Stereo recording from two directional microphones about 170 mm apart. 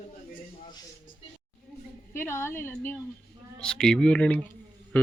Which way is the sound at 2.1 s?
15° left (ahead or behind).